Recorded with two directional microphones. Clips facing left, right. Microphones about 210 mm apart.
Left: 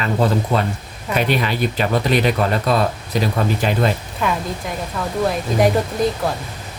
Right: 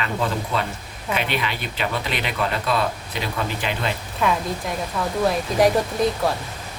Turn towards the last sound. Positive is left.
turn(degrees=0)  # may be behind; listen again after turning